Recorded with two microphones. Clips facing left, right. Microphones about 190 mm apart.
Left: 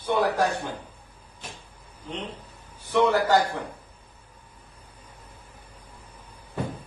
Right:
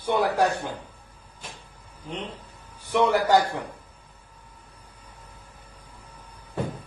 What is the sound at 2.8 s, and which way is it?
Speech, 15° right (ahead or behind).